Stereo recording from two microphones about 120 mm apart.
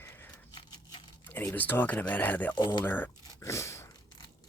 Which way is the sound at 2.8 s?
15° left (ahead or behind).